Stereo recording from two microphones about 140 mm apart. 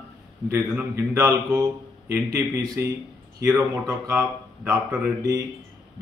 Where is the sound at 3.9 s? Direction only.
15° right (ahead or behind).